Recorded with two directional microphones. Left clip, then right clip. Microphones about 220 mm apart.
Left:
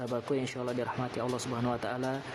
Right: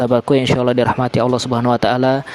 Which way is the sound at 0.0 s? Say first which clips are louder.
Right 18 dB; 45° right (ahead or behind).